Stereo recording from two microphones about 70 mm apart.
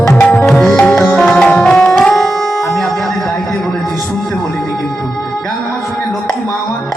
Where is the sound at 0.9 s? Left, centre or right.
Left.